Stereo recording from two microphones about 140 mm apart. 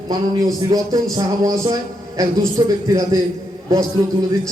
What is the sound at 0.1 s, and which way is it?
A man's voice, 25° right (ahead or behind).